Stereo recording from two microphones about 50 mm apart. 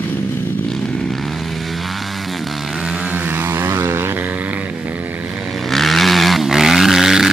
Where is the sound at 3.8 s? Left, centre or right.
Right.